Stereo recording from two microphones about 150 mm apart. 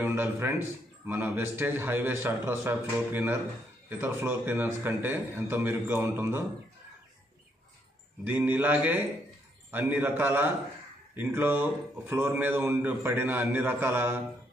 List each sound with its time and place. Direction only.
0.0 s speech: 15° right (ahead or behind)
8.2 s speech: 10° right (ahead or behind)